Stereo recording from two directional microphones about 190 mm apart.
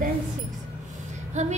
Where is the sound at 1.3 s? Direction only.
35° right (ahead or behind).